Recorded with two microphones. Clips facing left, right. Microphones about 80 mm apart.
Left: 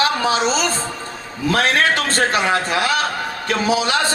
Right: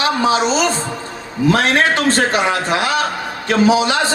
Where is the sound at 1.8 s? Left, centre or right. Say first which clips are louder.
Right 3 dB; right.